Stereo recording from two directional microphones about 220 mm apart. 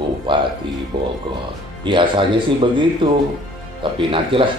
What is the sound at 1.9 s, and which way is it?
Speech, 20° right (ahead or behind).